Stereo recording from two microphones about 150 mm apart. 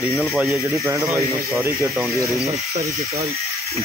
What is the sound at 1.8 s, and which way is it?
Speech, centre (ahead or behind).